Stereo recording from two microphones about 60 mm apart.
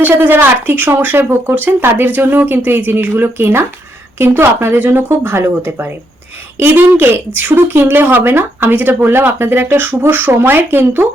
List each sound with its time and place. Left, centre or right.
0.0 s speech: right